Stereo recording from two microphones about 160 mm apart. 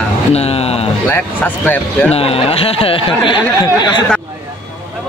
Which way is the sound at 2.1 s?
40° left (ahead or behind).